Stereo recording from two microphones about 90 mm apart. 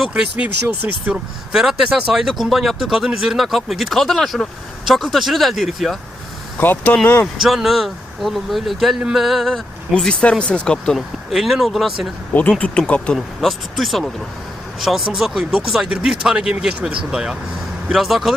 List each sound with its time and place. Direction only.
0.1 s speech: 15° right (ahead or behind)
1.1 s speech: 5° right (ahead or behind)
6.6 s speech: 20° left (ahead or behind)
7.4 s speech: centre (ahead or behind)
12.3 s speech: 15° left (ahead or behind)
13.1 s speech: centre (ahead or behind)